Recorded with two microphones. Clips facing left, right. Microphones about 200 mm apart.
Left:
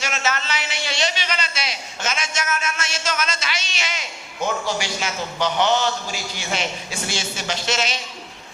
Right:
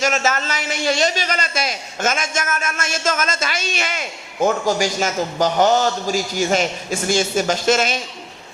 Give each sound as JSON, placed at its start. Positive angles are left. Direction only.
{"t": 0.0, "sound": "a man's voice", "side_deg": -45}